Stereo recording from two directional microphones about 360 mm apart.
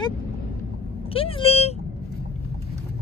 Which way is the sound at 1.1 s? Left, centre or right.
Centre.